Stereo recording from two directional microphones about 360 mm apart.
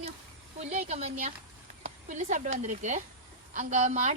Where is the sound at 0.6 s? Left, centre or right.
Centre.